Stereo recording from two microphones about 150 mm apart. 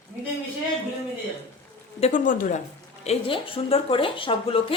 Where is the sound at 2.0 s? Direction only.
60° left (ahead or behind).